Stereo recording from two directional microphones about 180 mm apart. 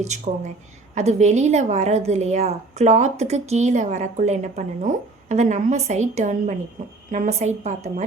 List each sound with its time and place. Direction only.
0.0 s a woman's voice: 40° right (ahead or behind)